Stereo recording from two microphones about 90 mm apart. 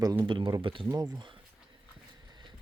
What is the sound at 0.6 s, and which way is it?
Speech, 70° right (ahead or behind).